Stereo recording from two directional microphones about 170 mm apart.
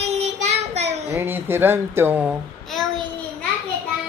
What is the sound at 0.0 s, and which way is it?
Child singing, 40° right (ahead or behind).